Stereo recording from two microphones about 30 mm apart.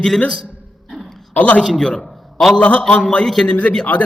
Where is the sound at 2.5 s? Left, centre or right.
Left.